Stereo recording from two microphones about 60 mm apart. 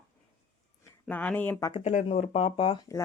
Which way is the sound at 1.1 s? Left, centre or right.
Left.